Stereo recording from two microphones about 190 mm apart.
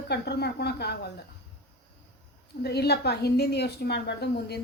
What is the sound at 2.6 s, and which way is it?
A woman's voice, 60° left (ahead or behind).